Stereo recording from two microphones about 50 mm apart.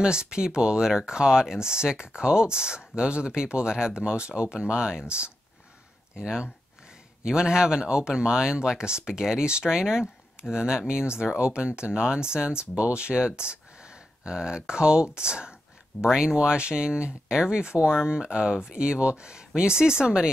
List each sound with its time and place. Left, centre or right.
0.0 s speech: centre
6.1 s speech: centre